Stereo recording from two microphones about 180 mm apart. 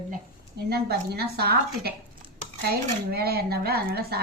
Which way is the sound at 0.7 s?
60° right (ahead or behind).